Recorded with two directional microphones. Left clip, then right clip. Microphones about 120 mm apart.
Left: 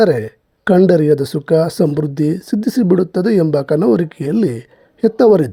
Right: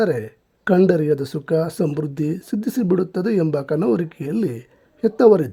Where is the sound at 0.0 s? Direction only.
25° left (ahead or behind).